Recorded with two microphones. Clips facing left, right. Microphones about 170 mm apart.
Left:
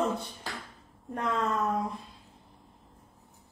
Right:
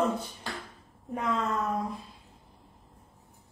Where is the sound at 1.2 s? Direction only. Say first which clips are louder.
Even; centre (ahead or behind).